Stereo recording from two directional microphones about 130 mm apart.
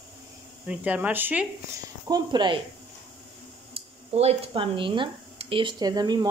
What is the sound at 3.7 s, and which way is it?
Speech, 50° right (ahead or behind).